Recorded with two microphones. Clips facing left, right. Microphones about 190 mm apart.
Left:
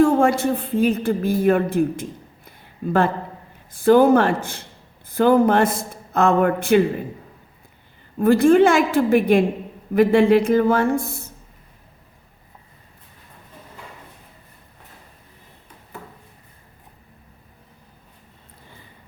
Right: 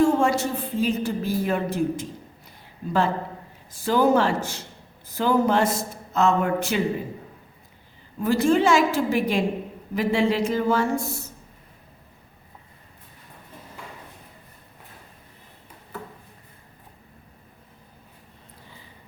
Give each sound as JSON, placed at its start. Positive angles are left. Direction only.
{"t": 0.0, "sound": "a woman's voice", "side_deg": 55}
{"t": 8.2, "sound": "speech", "side_deg": 55}